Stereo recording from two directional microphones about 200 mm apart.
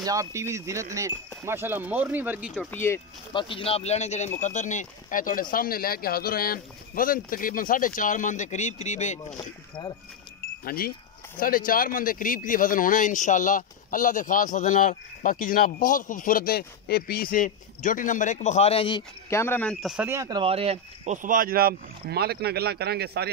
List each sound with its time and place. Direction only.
0.0 s speech: 15° right (ahead or behind)
2.7 s speech: 10° left (ahead or behind)
3.3 s speech: 25° left (ahead or behind)
9.4 s speech: 15° left (ahead or behind)
10.6 s speech: 50° left (ahead or behind); by 20.1 s centre (ahead or behind)
20.1 s speech: 20° right (ahead or behind); by 23.3 s 55° right (ahead or behind)